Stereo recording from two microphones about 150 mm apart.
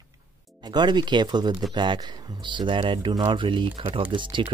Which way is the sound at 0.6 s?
30° right (ahead or behind).